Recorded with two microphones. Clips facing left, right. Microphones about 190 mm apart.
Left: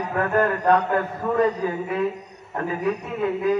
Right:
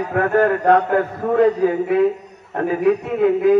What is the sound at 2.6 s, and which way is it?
Speech, 60° right (ahead or behind).